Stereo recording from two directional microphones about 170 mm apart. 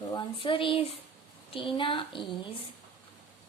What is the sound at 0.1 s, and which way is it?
Speech, 30° left (ahead or behind).